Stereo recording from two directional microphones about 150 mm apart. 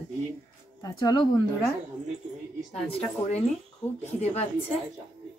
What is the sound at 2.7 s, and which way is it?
Speech, 45° left (ahead or behind).